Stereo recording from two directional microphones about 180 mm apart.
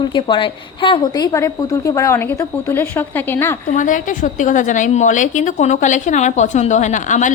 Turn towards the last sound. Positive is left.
turn(degrees=45)  # may be behind; listen again after turning